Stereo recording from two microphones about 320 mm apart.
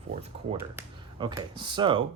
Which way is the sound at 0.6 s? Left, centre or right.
Centre.